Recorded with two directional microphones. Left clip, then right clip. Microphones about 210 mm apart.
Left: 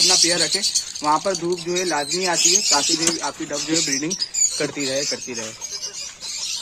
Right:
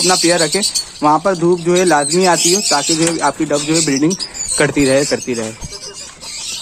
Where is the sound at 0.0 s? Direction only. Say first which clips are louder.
Right 4 dB; 15° right (ahead or behind).